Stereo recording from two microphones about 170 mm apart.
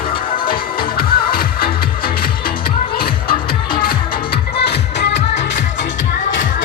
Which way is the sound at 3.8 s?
65° left (ahead or behind).